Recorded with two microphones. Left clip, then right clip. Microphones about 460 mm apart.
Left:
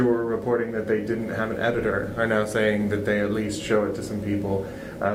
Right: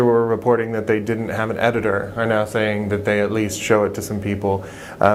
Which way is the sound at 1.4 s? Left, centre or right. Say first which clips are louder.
Right 6 dB; right.